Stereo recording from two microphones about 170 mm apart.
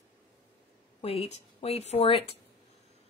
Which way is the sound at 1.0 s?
35° left (ahead or behind).